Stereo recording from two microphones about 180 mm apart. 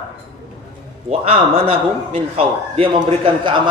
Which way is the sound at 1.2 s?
30° right (ahead or behind).